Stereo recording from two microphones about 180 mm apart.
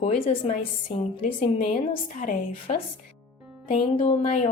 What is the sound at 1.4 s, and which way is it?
Speech, 35° left (ahead or behind).